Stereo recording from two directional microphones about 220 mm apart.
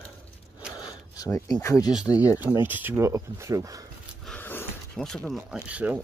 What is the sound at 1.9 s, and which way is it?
Speech, 5° right (ahead or behind).